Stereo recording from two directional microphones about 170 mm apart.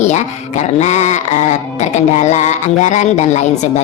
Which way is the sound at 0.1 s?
40° left (ahead or behind).